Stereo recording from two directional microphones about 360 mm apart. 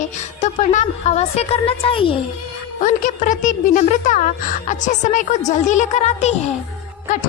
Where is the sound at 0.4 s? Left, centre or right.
Centre.